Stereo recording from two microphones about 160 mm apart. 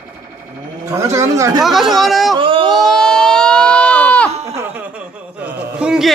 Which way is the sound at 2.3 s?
30° right (ahead or behind).